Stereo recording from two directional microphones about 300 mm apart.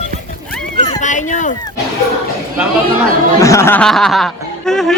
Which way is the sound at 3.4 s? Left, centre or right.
Centre.